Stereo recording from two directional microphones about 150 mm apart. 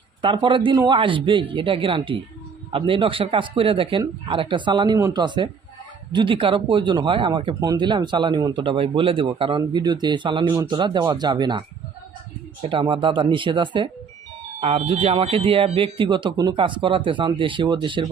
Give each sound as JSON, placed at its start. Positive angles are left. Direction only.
{"t": 0.2, "sound": "speech", "side_deg": -35}
{"t": 12.6, "sound": "speech", "side_deg": -35}
{"t": 14.6, "sound": "speech", "side_deg": -40}